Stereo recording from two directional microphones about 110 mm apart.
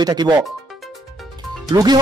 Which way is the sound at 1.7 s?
40° right (ahead or behind).